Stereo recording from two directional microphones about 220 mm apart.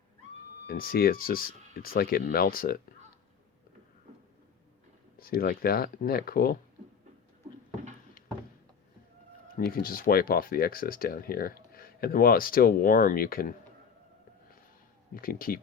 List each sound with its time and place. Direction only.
0.7 s speech: 40° left (ahead or behind)
5.2 s speech: 40° left (ahead or behind)
9.6 s speech: 40° left (ahead or behind)
15.1 s speech: 40° left (ahead or behind)